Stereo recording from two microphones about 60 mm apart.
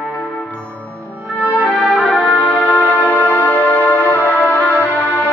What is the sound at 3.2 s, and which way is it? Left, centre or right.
Music, left.